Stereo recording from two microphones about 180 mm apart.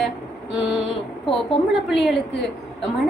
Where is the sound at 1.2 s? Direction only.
30° left (ahead or behind).